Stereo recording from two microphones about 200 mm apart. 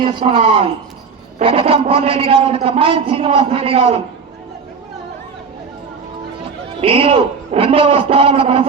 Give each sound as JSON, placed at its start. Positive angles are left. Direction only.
{"t": 0.0, "sound": "a man's voice", "side_deg": -30}
{"t": 6.8, "sound": "a man's voice", "side_deg": -25}